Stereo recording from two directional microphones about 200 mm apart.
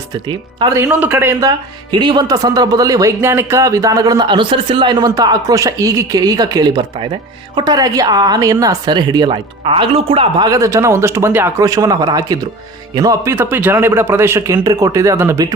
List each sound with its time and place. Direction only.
0.3 s a woman's voice: 20° right (ahead or behind)